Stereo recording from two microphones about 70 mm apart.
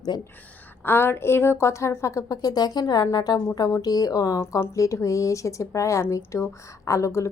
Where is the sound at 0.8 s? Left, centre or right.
Left.